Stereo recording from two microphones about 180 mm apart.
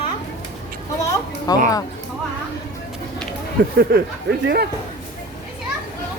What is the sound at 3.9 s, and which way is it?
Speech, 60° right (ahead or behind).